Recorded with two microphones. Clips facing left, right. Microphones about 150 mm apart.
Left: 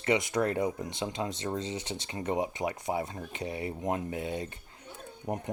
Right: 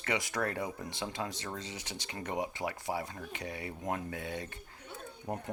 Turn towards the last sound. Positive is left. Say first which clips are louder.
# left 4 dB
turn(degrees=20)  # may be behind; listen again after turning